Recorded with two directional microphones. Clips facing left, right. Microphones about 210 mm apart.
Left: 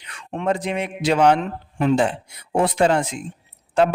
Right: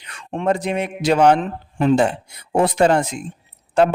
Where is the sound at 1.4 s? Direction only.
35° right (ahead or behind).